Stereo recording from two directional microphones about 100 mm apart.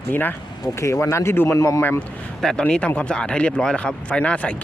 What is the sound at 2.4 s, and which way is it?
Speech, 10° left (ahead or behind).